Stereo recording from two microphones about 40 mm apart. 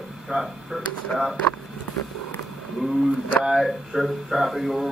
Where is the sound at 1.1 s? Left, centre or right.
Centre.